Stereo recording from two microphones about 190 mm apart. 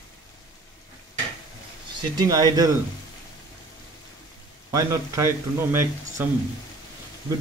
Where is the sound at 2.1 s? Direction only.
20° right (ahead or behind).